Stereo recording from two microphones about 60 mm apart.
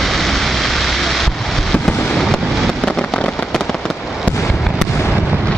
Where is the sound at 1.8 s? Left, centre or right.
Centre.